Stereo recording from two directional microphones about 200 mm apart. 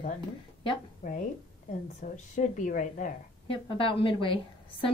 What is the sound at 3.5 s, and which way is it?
A woman's voice, 25° left (ahead or behind).